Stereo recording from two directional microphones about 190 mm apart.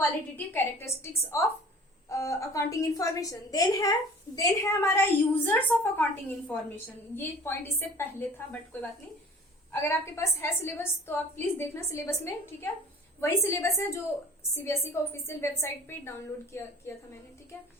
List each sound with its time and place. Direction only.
0.3 s a woman's voice: 10° left (ahead or behind)